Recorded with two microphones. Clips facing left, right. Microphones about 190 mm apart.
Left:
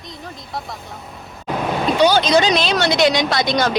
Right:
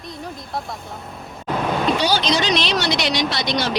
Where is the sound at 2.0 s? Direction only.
50° left (ahead or behind).